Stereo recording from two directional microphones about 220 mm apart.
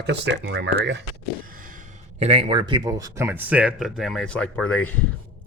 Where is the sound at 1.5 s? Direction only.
40° right (ahead or behind).